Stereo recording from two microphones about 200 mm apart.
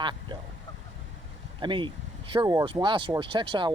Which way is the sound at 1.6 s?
25° right (ahead or behind).